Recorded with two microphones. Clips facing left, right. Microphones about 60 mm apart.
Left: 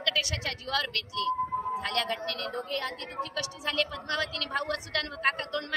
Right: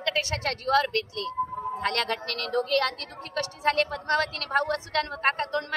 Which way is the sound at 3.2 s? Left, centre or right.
Right.